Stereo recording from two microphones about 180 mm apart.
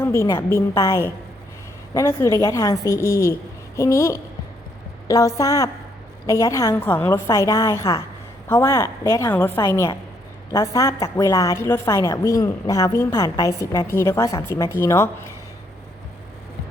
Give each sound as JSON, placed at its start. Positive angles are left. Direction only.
{"t": 0.0, "sound": "a woman's voice", "side_deg": 15}